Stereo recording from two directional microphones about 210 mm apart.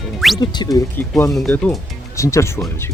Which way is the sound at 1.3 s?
5° left (ahead or behind).